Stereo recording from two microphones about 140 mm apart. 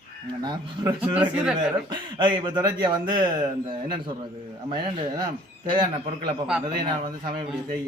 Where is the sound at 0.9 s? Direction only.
10° right (ahead or behind).